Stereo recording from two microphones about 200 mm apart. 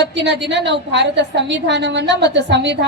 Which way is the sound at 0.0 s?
60° right (ahead or behind).